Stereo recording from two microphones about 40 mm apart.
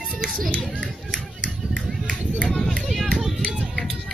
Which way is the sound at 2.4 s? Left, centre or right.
Left.